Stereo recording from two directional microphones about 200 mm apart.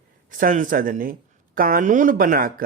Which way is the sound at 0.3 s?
45° right (ahead or behind).